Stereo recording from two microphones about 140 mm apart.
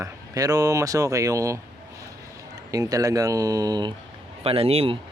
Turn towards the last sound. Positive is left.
turn(degrees=-45)  # may be behind; listen again after turning